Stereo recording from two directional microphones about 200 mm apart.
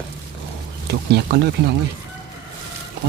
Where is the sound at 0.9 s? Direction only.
55° right (ahead or behind).